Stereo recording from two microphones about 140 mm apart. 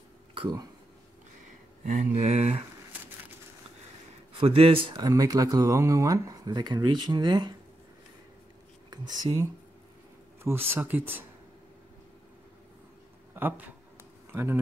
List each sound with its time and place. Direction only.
0.3 s speech: 35° right (ahead or behind)
1.9 s speech: 60° right (ahead or behind)
4.3 s a man's voice: 45° right (ahead or behind)
4.9 s speech: 25° right (ahead or behind)
8.9 s speech: 30° right (ahead or behind)
13.3 s speech: 15° right (ahead or behind)